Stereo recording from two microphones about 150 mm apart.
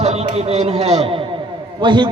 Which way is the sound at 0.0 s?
45° right (ahead or behind).